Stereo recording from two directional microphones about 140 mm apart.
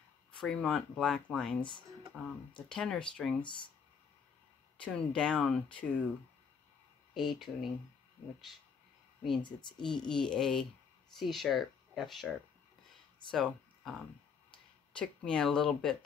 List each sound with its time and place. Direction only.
0.3 s speech: 5° left (ahead or behind)
4.7 s speech: 10° left (ahead or behind)
7.2 s speech: centre (ahead or behind)
9.4 s speech: 35° left (ahead or behind)
9.8 s speech: 5° left (ahead or behind)
13.3 s speech: centre (ahead or behind)